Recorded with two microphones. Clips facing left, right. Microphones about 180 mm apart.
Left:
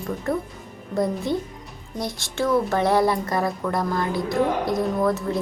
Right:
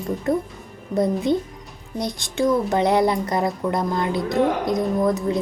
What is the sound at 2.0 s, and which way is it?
A woman's voice, 15° right (ahead or behind).